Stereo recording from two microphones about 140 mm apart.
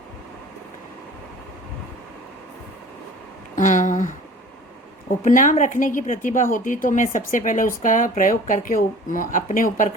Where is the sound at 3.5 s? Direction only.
65° left (ahead or behind).